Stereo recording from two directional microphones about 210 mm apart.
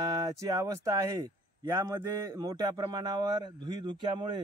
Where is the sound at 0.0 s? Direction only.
15° right (ahead or behind).